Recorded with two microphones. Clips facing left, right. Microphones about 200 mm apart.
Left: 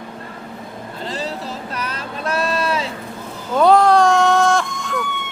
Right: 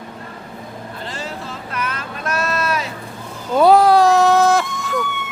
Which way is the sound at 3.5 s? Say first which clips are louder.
Right 1 dB; 5° right (ahead or behind).